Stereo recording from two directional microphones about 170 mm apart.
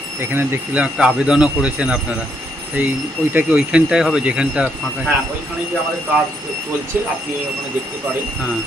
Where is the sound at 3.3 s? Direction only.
10° right (ahead or behind).